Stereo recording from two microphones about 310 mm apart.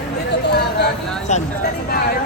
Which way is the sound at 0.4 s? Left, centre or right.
Left.